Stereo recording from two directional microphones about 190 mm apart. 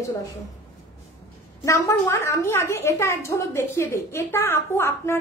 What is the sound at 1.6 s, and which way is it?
A woman's voice, 15° left (ahead or behind).